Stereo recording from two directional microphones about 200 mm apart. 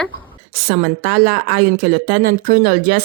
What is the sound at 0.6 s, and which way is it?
A woman's voice, 45° right (ahead or behind).